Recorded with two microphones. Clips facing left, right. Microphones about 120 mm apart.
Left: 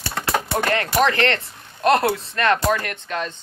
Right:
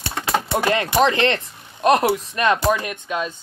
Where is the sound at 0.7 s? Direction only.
20° right (ahead or behind).